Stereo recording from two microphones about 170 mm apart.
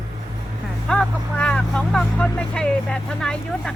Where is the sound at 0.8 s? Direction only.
5° left (ahead or behind).